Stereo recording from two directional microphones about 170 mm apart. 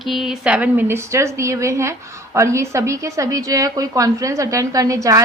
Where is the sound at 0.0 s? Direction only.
Centre (ahead or behind).